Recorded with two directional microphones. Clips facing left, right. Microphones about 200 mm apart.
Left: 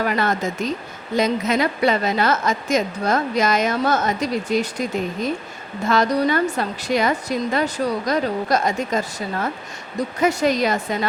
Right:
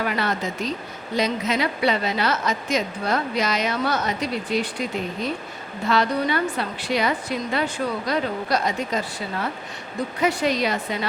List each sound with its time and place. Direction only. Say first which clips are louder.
0.0 s a woman's voice: left 4 dB; 45° left (ahead or behind)